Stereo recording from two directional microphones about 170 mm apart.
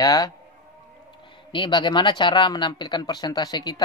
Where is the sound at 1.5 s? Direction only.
30° left (ahead or behind).